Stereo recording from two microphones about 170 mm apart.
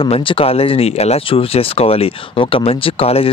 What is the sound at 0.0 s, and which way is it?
Speech, 30° left (ahead or behind).